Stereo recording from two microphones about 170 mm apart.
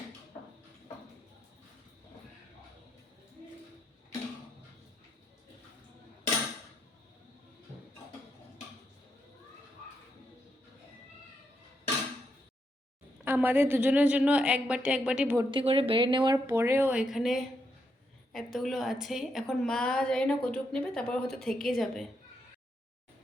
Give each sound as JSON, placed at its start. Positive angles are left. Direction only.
{"t": 13.2, "sound": "a woman's voice", "side_deg": -10}
{"t": 15.4, "sound": "a woman's voice", "side_deg": -30}